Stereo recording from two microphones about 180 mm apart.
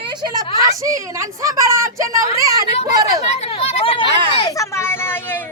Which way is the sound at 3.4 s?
35° left (ahead or behind).